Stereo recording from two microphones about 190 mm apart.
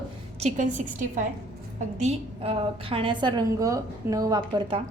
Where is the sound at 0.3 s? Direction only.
40° right (ahead or behind).